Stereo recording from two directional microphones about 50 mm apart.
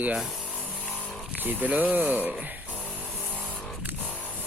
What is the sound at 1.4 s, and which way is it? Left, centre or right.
Speech, right.